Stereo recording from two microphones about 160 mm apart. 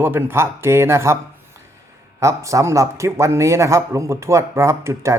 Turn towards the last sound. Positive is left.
turn(degrees=-20)  # may be behind; listen again after turning